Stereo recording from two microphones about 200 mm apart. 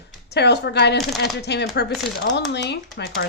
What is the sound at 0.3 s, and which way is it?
Speech, 55° left (ahead or behind).